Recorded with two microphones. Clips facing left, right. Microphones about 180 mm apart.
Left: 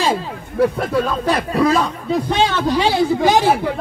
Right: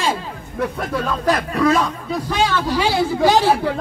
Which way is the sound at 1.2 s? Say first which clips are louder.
Right 3 dB; 30° left (ahead or behind).